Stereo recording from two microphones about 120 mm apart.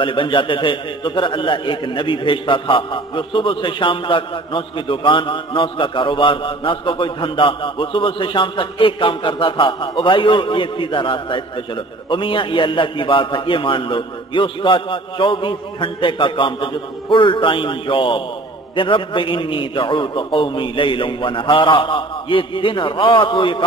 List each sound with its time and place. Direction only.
0.0 s a man's voice: 45° left (ahead or behind)